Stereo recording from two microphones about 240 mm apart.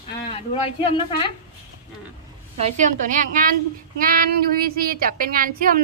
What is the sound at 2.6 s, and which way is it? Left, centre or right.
Speech, right.